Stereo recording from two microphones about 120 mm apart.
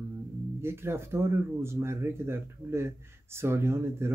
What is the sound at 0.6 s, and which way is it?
Speech, 20° right (ahead or behind).